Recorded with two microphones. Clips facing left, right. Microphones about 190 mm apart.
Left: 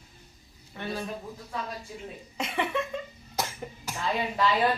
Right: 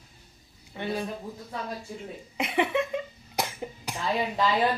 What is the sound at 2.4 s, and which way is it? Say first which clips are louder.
Cough: right 4 dB; 15° right (ahead or behind).